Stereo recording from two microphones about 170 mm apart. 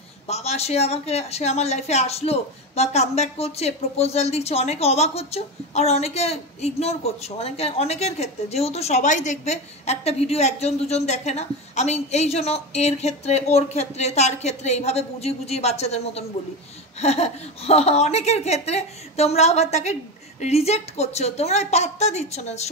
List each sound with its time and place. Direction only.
0.3 s a woman's voice: 40° left (ahead or behind)